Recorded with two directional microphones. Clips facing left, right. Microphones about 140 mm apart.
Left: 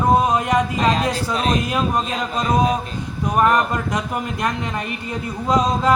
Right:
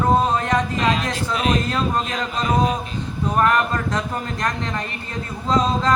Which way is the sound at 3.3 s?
15° left (ahead or behind).